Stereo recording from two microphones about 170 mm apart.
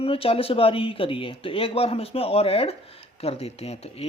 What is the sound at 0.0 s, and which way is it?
Speech, 35° left (ahead or behind).